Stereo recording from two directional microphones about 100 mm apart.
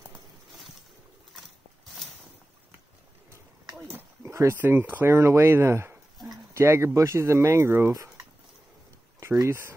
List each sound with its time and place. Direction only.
3.8 s a sound: 25° right (ahead or behind)
4.6 s speech: 20° right (ahead or behind)
9.2 s speech: 25° right (ahead or behind)